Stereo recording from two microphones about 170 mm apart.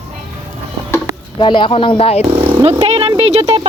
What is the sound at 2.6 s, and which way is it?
Speech, 30° right (ahead or behind).